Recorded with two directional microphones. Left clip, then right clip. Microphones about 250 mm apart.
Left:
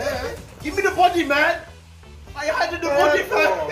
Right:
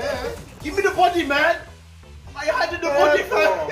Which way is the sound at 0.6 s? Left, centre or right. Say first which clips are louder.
Left 1 dB; centre.